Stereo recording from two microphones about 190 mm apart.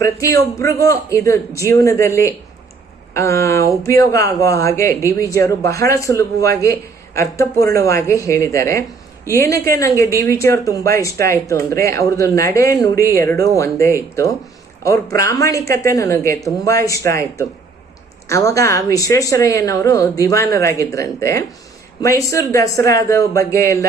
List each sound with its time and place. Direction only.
0.0 s speech: 15° left (ahead or behind)